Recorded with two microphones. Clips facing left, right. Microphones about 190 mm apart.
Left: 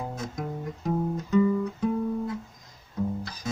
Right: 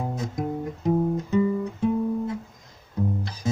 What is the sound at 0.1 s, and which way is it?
Music, 25° right (ahead or behind).